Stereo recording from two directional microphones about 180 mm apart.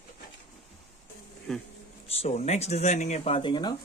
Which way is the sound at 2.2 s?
35° left (ahead or behind).